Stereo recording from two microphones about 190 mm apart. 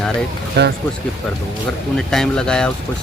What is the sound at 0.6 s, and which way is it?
Speech, 65° right (ahead or behind).